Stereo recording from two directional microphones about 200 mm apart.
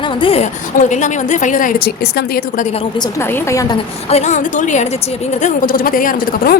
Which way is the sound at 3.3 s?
15° left (ahead or behind).